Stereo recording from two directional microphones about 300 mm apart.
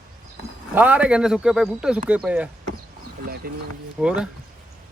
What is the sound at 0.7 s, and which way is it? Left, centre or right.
Speech, centre.